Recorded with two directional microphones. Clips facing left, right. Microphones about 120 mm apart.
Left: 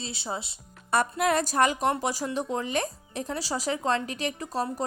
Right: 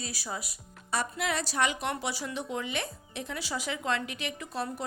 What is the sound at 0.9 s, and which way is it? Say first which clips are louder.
Speech: left 7 dB; 50° left (ahead or behind).